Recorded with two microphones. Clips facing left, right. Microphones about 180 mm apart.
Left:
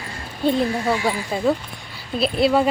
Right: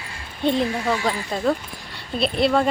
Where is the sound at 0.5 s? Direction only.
10° left (ahead or behind).